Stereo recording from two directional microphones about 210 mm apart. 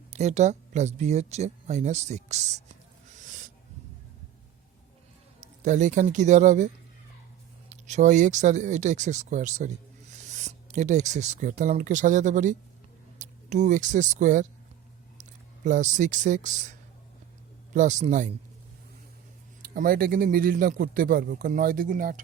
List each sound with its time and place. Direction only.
0.1 s speech: 35° right (ahead or behind)
3.2 s a sound: 40° right (ahead or behind)
5.4 s speech: 35° right (ahead or behind)
7.9 s speech: 35° right (ahead or behind)
17.7 s speech: 35° right (ahead or behind)
19.6 s speech: 40° right (ahead or behind)